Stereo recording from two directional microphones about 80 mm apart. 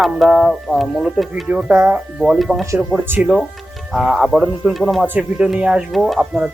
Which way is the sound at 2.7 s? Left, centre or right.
Right.